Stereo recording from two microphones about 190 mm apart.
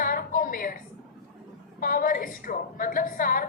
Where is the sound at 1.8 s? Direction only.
45° left (ahead or behind).